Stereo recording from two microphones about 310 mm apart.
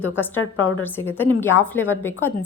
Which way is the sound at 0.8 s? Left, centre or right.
Centre.